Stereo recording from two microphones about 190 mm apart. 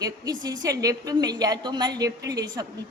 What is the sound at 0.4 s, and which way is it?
A woman's voice, 20° right (ahead or behind).